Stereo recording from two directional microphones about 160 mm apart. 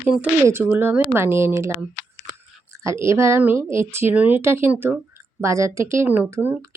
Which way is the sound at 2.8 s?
20° right (ahead or behind).